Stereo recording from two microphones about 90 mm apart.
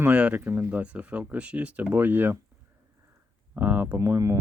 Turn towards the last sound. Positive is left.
turn(degrees=-35)  # may be behind; listen again after turning